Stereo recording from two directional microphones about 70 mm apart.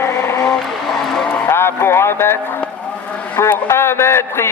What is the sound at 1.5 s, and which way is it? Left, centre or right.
Speech, left.